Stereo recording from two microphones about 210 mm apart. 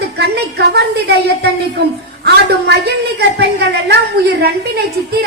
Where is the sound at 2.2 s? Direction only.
50° right (ahead or behind).